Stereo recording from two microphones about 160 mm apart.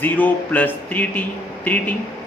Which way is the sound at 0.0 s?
10° left (ahead or behind).